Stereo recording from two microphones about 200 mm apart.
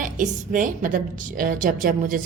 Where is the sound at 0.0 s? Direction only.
40° right (ahead or behind).